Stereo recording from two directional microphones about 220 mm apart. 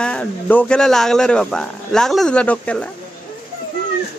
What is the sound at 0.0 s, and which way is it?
Speech, 5° left (ahead or behind).